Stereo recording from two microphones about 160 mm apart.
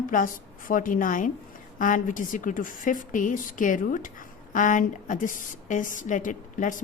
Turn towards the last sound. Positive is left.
turn(degrees=55)  # may be behind; listen again after turning